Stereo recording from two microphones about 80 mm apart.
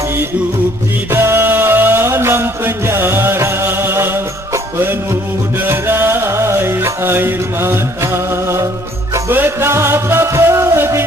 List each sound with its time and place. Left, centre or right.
1.1 s music: right
5.6 s music: right